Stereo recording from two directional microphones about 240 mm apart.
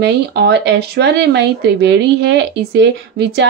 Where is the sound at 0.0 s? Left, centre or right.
Right.